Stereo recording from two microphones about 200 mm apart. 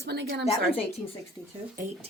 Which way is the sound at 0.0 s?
55° right (ahead or behind).